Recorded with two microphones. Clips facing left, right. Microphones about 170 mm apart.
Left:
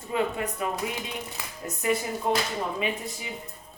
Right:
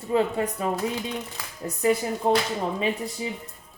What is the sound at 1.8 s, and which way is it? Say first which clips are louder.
Speech: right 4 dB; 30° right (ahead or behind).